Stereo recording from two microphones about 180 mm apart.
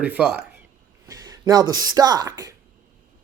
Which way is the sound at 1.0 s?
20° right (ahead or behind).